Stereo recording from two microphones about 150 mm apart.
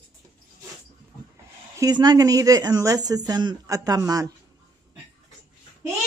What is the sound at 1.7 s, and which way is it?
Speech, 25° right (ahead or behind).